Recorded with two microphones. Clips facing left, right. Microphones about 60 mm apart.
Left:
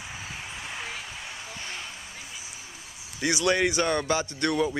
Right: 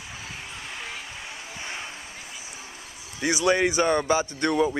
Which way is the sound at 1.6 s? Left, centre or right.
Right.